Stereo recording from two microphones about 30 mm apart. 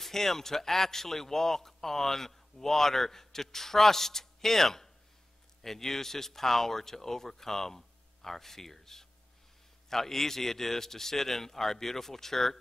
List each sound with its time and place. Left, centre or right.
0.0 s a man's voice: centre